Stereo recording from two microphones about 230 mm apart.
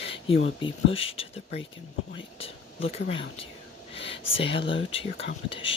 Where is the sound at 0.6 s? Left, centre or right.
Left.